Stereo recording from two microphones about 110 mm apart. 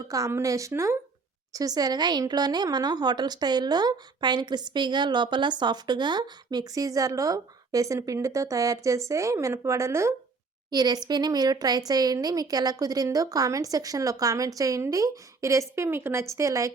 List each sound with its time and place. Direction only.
0.1 s a woman's voice: 25° right (ahead or behind)
10.7 s a woman's voice: 35° right (ahead or behind)